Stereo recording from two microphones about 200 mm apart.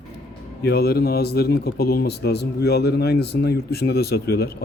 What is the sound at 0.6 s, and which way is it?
A man's voice, 55° left (ahead or behind).